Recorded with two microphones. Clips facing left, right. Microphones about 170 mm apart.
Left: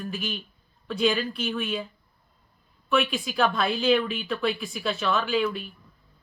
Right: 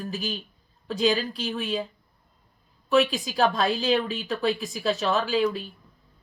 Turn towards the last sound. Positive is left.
turn(degrees=-35)  # may be behind; listen again after turning